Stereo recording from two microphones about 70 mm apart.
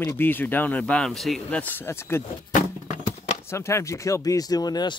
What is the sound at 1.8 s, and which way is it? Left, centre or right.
Speech, left.